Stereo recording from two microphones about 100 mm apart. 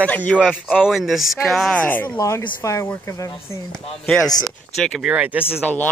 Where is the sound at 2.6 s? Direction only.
30° left (ahead or behind).